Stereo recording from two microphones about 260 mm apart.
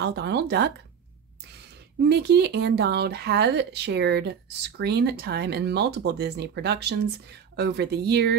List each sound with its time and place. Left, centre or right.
0.0 s speech: right
2.0 s speech: right